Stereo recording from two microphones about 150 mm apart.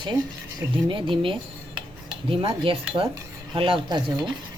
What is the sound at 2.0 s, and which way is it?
Cutlery, 35° right (ahead or behind).